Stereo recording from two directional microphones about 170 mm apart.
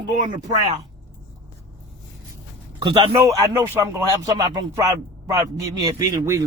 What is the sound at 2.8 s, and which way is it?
Speech, 30° right (ahead or behind).